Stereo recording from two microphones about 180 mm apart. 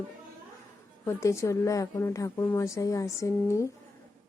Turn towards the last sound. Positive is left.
turn(degrees=15)  # may be behind; listen again after turning